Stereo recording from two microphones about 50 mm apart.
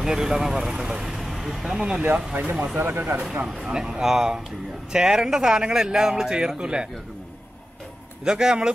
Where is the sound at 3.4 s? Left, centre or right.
Centre.